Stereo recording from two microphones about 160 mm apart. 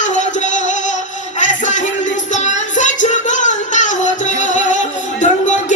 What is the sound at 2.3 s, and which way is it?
Child singing, 50° left (ahead or behind).